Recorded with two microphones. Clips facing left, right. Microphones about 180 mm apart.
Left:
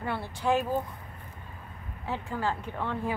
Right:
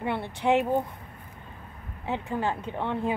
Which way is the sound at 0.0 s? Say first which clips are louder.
Right 3 dB; 20° right (ahead or behind).